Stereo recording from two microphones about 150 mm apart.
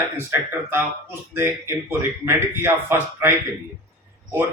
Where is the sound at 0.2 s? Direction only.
15° right (ahead or behind).